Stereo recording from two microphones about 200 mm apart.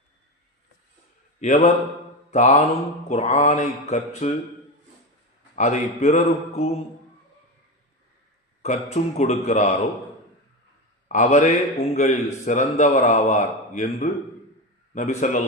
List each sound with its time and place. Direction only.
1.4 s a man's voice: 35° left (ahead or behind)
5.5 s a man's voice: 35° left (ahead or behind)
8.6 s a man's voice: 35° left (ahead or behind)
11.1 s a man's voice: 35° left (ahead or behind)